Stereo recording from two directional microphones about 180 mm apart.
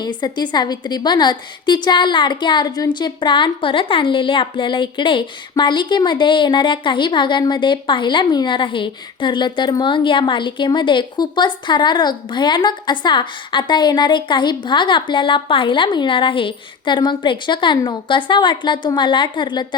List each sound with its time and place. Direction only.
0.0 s a woman's voice: 25° left (ahead or behind)